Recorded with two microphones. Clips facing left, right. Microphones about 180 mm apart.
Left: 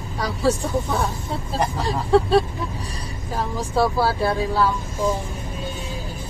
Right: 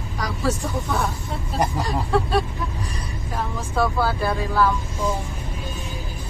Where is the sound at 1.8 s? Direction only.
30° left (ahead or behind).